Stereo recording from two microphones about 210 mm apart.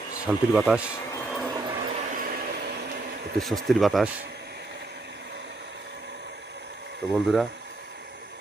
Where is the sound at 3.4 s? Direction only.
Centre (ahead or behind).